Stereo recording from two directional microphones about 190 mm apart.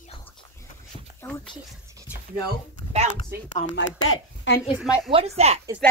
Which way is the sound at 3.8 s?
75° left (ahead or behind).